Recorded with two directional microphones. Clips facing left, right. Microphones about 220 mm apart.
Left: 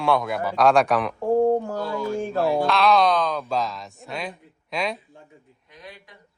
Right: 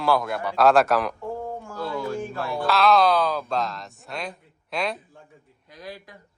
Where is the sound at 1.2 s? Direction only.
40° left (ahead or behind).